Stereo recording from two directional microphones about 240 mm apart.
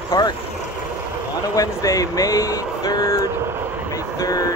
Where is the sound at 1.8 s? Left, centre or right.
Centre.